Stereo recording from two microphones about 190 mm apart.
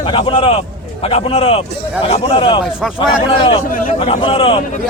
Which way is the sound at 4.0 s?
30° left (ahead or behind).